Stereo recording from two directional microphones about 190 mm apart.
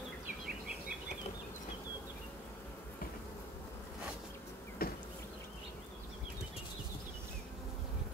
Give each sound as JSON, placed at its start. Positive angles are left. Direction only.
{"t": 4.8, "sound": "bee", "side_deg": 55}